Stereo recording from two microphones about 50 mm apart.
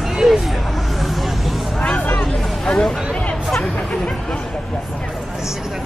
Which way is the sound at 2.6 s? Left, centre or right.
Centre.